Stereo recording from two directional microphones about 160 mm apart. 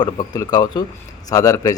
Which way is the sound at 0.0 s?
25° left (ahead or behind).